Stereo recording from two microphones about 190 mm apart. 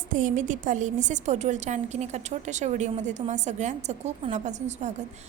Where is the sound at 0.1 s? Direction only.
45° right (ahead or behind).